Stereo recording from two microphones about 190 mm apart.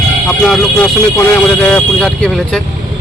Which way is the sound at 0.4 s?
Centre (ahead or behind).